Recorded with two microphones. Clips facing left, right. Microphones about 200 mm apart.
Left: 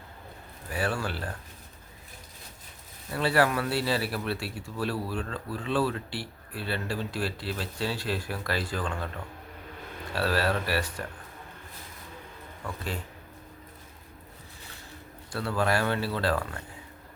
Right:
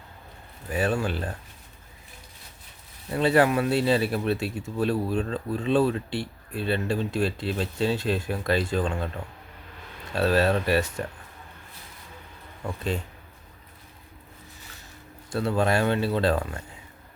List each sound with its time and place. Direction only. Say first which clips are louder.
0.7 s a man's voice: right 5 dB; 20° right (ahead or behind)
3.1 s a man's voice: right 4 dB; 20° right (ahead or behind)
10.2 s a man's voice: right 5 dB; 25° right (ahead or behind)
12.6 s a man's voice: right 6 dB; 20° right (ahead or behind)
15.3 s a man's voice: right 4 dB; 25° right (ahead or behind)